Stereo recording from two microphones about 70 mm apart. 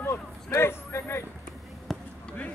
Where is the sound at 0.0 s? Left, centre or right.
Left.